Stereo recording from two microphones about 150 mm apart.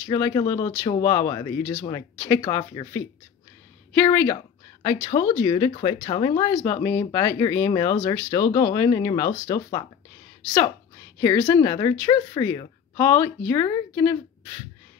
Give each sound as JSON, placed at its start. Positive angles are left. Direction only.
{"t": 0.1, "sound": "speech", "side_deg": 25}